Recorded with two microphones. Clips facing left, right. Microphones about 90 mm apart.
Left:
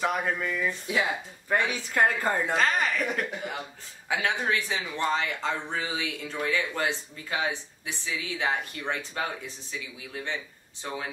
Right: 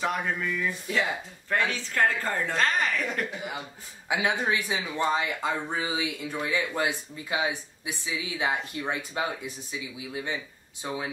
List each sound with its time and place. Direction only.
0.0 s a woman's voice: 5° left (ahead or behind)
2.5 s speech: centre (ahead or behind)
4.1 s speech: 15° right (ahead or behind)